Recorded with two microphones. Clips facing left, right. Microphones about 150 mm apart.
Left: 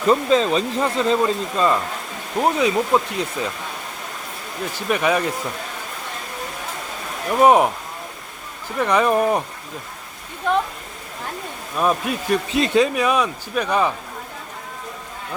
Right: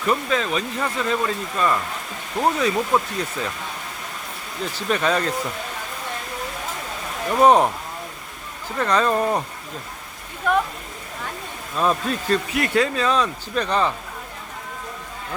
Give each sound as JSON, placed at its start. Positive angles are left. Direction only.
{"t": 0.1, "sound": "a man's voice", "side_deg": 30}
{"t": 4.7, "sound": "a man's voice", "side_deg": 15}
{"t": 7.3, "sound": "a man's voice", "side_deg": 10}
{"t": 8.8, "sound": "a man's voice", "side_deg": 15}
{"t": 11.8, "sound": "a man's voice", "side_deg": 10}
{"t": 12.5, "sound": "a man's voice", "side_deg": 25}